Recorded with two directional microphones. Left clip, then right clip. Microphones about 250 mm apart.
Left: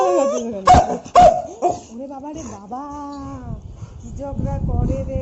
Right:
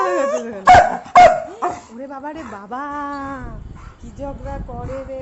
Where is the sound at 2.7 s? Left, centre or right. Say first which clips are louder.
Right 5 dB; right.